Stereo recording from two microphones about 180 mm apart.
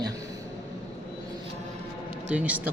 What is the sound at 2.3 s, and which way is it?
Speech, 5° right (ahead or behind).